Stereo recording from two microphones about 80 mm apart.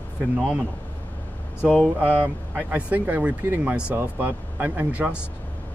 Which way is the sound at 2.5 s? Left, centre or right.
Right.